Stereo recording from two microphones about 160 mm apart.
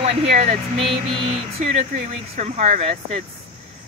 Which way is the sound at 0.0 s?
45° right (ahead or behind).